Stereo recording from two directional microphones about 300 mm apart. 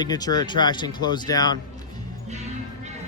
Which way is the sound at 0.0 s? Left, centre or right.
Centre.